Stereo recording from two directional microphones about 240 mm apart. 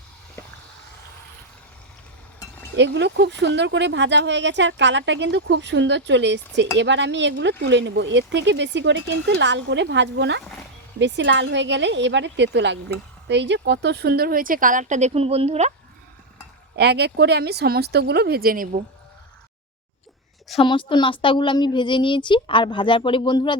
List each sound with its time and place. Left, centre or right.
0.4 s a sound: centre
2.7 s speech: right
16.7 s speech: right
20.6 s a woman's voice: centre